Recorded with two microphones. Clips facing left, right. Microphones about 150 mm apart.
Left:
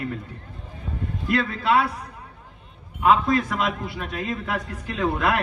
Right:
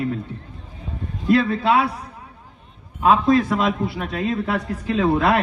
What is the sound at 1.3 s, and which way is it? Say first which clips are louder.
Speech: right 5 dB; 25° right (ahead or behind).